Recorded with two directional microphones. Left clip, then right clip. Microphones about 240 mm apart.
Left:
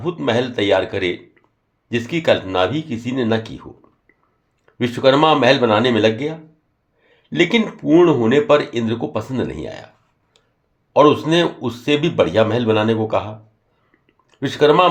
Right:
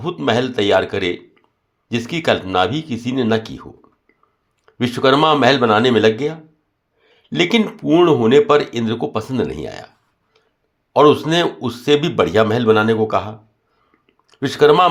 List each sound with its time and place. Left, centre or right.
0.0 s speech: right
10.9 s speech: right
14.1 s a sound: right